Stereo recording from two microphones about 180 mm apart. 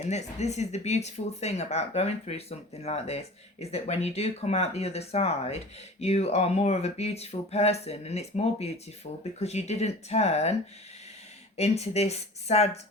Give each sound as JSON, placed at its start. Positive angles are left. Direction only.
{"t": 0.0, "sound": "speech", "side_deg": 40}
{"t": 11.5, "sound": "speech", "side_deg": 35}